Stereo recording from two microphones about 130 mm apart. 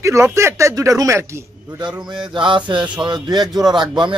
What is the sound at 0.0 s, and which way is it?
Speech, 20° right (ahead or behind).